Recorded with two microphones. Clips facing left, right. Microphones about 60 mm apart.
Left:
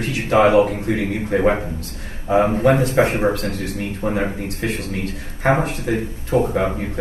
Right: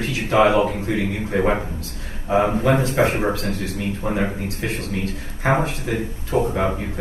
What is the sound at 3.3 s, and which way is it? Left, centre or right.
A man's voice, left.